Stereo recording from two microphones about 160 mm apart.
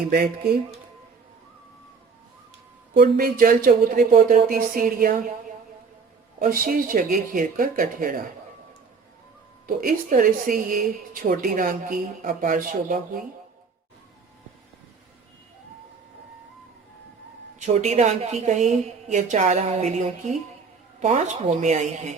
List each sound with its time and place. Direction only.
0.1 s speech: 70° right (ahead or behind)
2.9 s speech: 65° right (ahead or behind)
6.4 s speech: 65° right (ahead or behind)
9.6 s speech: 60° right (ahead or behind)
17.6 s a woman's voice: 45° right (ahead or behind)